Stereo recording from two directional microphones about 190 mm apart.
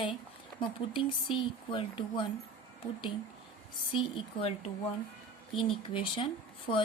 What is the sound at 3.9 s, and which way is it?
Speech, 25° left (ahead or behind).